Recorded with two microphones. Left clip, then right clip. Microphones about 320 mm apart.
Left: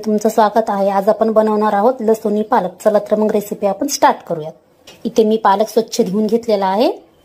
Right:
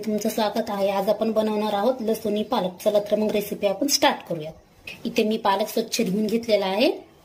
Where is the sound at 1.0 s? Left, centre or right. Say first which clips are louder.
Left 10 dB; left.